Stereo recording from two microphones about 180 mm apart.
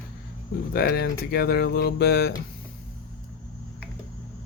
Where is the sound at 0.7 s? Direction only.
60° left (ahead or behind).